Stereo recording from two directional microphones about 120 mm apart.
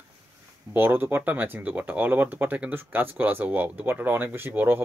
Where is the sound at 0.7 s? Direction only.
15° right (ahead or behind).